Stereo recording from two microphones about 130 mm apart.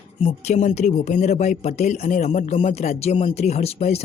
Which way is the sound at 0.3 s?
60° left (ahead or behind).